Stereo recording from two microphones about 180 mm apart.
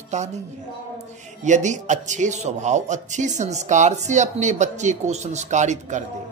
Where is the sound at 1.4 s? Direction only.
40° right (ahead or behind).